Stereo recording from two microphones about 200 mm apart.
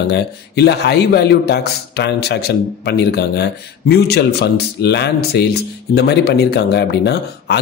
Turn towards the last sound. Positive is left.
turn(degrees=55)  # may be behind; listen again after turning